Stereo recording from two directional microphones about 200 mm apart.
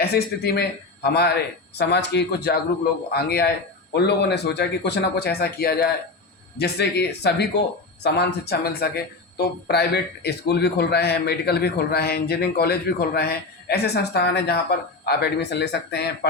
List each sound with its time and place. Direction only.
0.0 s speech: 50° left (ahead or behind)